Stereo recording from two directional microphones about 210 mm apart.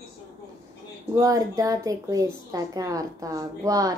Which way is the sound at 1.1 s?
15° right (ahead or behind).